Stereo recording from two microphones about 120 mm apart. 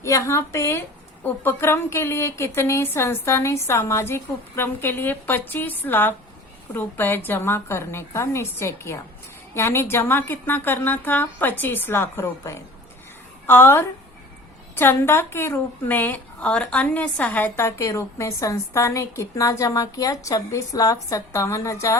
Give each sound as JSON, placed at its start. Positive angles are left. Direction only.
{"t": 0.0, "sound": "a woman's voice", "side_deg": 25}